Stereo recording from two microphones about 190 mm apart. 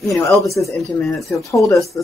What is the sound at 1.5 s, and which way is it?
Speech, 15° left (ahead or behind).